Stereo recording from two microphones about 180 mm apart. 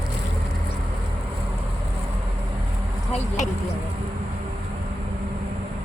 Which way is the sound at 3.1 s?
40° left (ahead or behind).